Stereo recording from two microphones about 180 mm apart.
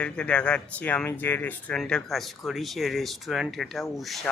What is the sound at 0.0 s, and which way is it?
Speech, 5° left (ahead or behind).